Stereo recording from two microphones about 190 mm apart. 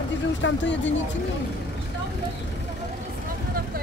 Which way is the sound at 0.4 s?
70° left (ahead or behind).